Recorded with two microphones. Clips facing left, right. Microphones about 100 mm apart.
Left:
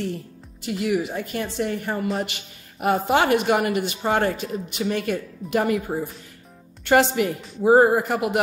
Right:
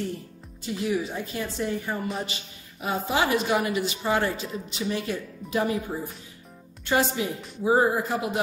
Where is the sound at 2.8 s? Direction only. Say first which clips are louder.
Left 6 dB; 65° left (ahead or behind).